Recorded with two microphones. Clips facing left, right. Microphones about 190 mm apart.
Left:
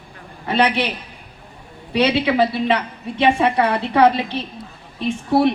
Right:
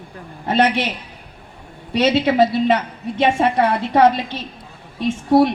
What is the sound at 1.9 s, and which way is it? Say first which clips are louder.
A woman's voice: right 1 dB; 60° left (ahead or behind).